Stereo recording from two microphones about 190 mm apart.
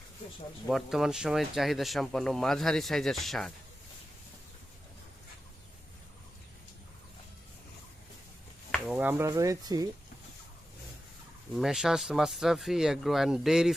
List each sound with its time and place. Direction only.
0.7 s speech: centre (ahead or behind)
8.7 s speech: 5° right (ahead or behind)
11.5 s speech: centre (ahead or behind)